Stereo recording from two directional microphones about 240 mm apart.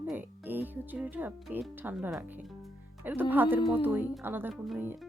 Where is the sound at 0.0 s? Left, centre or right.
Centre.